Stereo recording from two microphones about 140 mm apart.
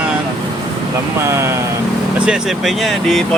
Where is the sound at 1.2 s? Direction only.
20° right (ahead or behind).